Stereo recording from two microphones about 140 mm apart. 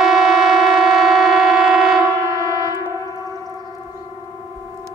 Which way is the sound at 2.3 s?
25° left (ahead or behind).